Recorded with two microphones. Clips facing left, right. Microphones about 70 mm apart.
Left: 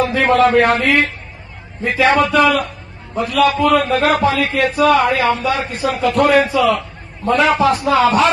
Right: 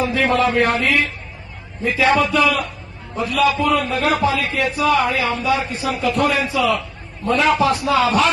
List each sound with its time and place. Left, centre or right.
0.0 s a man's voice: left